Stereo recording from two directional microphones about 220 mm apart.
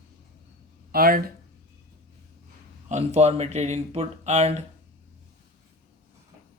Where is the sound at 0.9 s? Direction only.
45° right (ahead or behind).